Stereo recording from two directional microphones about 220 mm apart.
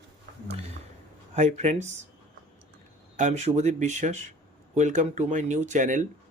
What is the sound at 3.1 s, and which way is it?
Speech, 30° right (ahead or behind).